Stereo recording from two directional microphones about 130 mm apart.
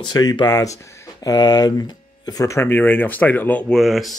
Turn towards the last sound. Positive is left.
turn(degrees=0)  # may be behind; listen again after turning